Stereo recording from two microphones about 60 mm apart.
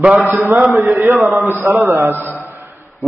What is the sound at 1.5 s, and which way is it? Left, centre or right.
Speech, right.